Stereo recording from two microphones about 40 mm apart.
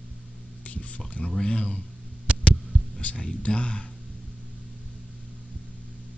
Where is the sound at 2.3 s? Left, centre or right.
Right.